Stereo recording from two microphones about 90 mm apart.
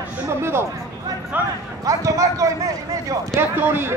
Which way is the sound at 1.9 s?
40° right (ahead or behind).